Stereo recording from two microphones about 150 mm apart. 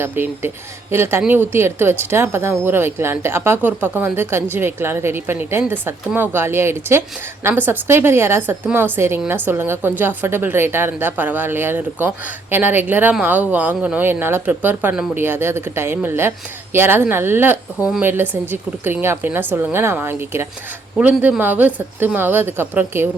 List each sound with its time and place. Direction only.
0.0 s a woman's voice: 15° right (ahead or behind)